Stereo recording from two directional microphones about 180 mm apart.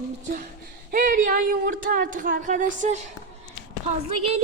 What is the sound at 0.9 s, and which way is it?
Speech, 50° right (ahead or behind).